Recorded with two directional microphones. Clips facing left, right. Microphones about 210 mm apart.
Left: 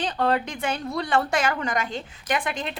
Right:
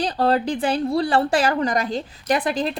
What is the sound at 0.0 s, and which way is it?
A woman's voice, 35° right (ahead or behind).